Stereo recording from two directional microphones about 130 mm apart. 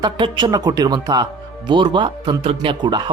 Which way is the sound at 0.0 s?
40° right (ahead or behind).